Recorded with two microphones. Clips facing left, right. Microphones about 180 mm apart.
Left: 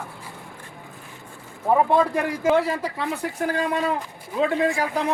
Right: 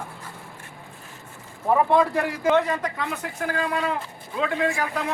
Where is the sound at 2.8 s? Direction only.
30° left (ahead or behind).